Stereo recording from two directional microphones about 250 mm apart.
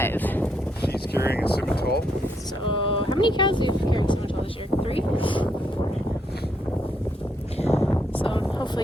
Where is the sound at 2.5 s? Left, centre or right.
Left.